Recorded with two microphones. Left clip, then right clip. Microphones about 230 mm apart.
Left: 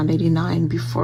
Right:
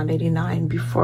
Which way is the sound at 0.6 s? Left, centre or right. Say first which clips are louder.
Left 2 dB; centre.